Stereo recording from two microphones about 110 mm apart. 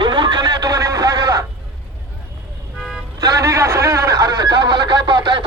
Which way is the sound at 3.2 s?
30° right (ahead or behind).